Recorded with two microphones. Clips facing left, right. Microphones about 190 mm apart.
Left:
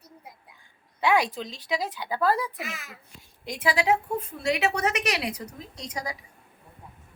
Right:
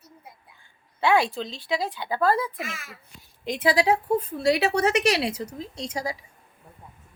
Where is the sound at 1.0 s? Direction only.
15° left (ahead or behind).